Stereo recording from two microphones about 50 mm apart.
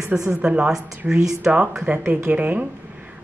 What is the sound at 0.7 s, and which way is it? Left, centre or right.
Speech, centre.